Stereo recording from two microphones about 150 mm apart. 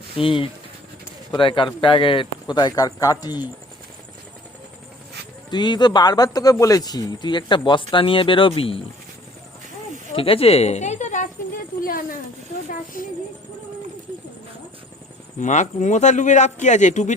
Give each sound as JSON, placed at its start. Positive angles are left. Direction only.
{"t": 0.2, "sound": "speech", "side_deg": 35}
{"t": 5.5, "sound": "speech", "side_deg": 30}
{"t": 10.2, "sound": "a woman's voice", "side_deg": 40}
{"t": 11.8, "sound": "speech", "side_deg": 75}
{"t": 15.4, "sound": "a man's voice", "side_deg": 55}